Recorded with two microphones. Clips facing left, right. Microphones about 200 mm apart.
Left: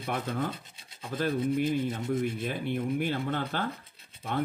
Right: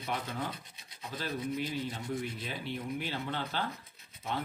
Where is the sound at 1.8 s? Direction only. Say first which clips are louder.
Left 6 dB; 25° left (ahead or behind).